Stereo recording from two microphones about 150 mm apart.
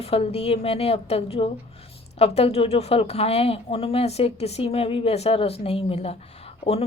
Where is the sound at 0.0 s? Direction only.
40° left (ahead or behind).